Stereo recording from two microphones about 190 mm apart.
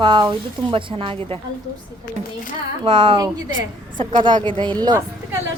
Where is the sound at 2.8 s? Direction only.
25° right (ahead or behind).